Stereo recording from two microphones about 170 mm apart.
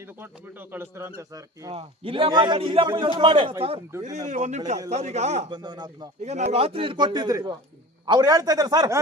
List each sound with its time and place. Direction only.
0.2 s speech: 10° right (ahead or behind)
1.7 s a man's voice: 35° right (ahead or behind)
4.0 s a man's voice: 45° right (ahead or behind)
5.5 s a man's voice: 25° right (ahead or behind)
6.2 s a man's voice: 40° right (ahead or behind); by 9.0 s 25° right (ahead or behind)